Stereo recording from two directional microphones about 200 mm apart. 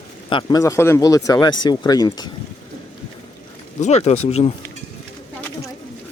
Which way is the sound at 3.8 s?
35° left (ahead or behind).